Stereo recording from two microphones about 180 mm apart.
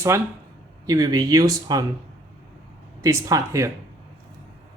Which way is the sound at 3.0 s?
15° right (ahead or behind).